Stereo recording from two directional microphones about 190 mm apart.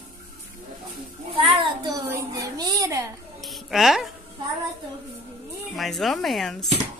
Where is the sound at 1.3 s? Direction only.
25° right (ahead or behind).